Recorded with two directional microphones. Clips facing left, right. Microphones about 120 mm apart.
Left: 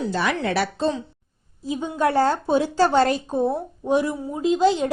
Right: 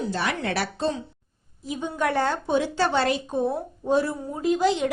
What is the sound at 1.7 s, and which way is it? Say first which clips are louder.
A woman's voice: left 4 dB; 25° left (ahead or behind).